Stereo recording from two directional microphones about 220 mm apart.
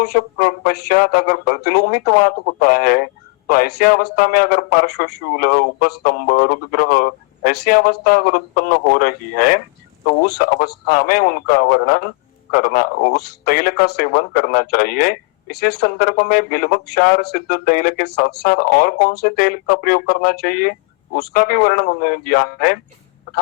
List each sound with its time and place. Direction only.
0.0 s speech: 45° left (ahead or behind)